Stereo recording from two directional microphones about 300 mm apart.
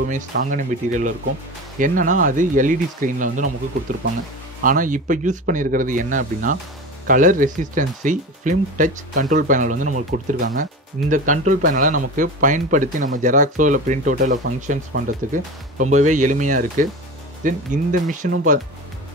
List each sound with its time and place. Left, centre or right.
0.0 s speech: right
4.6 s speech: right